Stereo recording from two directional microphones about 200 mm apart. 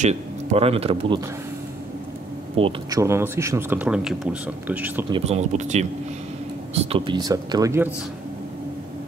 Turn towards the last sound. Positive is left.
turn(degrees=-15)  # may be behind; listen again after turning